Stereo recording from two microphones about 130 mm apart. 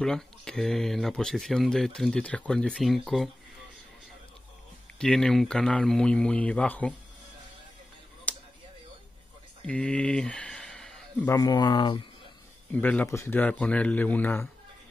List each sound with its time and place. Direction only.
0.0 s speech: 5° left (ahead or behind)
4.9 s speech: 5° left (ahead or behind)
8.3 s a sound: 10° left (ahead or behind)
9.7 s a sound: 10° left (ahead or behind)
11.2 s speech: 25° left (ahead or behind)
12.7 s speech: 10° left (ahead or behind)